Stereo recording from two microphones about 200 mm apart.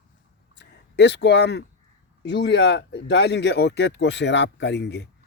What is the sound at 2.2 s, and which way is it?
Speech, 60° left (ahead or behind).